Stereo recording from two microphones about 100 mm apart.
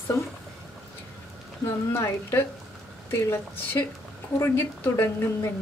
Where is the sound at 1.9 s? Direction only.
30° left (ahead or behind).